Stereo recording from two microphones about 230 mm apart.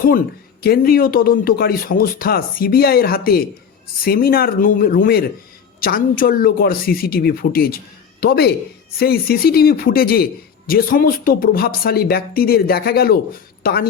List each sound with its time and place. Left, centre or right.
0.6 s speech: left